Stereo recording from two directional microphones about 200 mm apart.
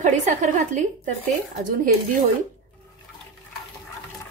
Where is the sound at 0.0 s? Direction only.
40° right (ahead or behind).